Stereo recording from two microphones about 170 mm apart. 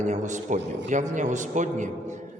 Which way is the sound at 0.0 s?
45° right (ahead or behind).